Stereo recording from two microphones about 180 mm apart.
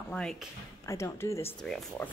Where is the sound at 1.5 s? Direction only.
5° left (ahead or behind).